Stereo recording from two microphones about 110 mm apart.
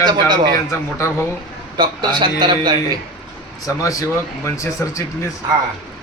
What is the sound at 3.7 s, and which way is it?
Speech, 30° left (ahead or behind).